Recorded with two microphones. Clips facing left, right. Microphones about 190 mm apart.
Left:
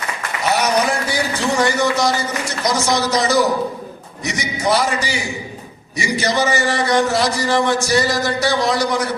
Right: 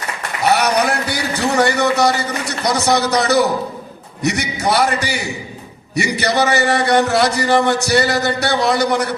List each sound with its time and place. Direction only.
0.5 s a man's voice: 65° right (ahead or behind)